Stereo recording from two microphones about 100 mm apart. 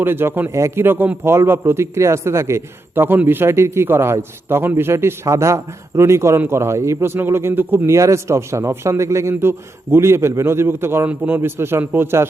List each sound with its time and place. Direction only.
0.0 s a man's voice: 20° right (ahead or behind)